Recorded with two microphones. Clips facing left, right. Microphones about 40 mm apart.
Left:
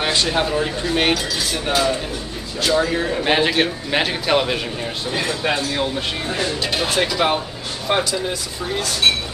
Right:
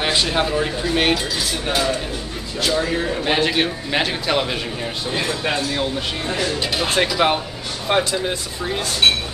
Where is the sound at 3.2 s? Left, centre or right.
Centre.